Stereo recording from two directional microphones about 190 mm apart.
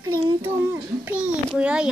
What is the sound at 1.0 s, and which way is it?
Speech, 5° right (ahead or behind).